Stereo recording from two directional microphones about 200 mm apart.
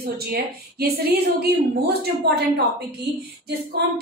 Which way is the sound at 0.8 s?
50° right (ahead or behind).